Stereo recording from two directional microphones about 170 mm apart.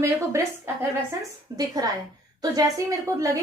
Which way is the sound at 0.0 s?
15° right (ahead or behind).